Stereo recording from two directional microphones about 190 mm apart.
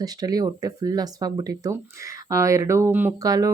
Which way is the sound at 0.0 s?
20° right (ahead or behind).